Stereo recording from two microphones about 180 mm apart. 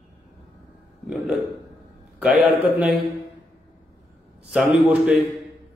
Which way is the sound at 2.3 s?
10° right (ahead or behind).